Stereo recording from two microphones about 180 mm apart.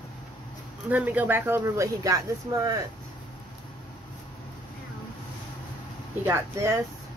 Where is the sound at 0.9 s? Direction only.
10° right (ahead or behind).